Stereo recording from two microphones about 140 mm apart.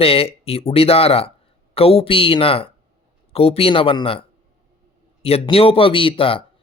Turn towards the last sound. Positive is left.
turn(degrees=40)  # may be behind; listen again after turning